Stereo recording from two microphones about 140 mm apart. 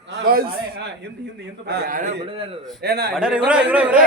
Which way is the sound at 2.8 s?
90° right.